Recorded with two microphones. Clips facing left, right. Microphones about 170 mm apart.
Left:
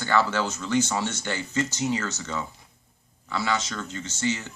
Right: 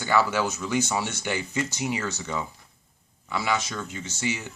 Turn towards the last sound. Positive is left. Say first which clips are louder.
# left 2 dB
turn(degrees=-10)  # may be behind; listen again after turning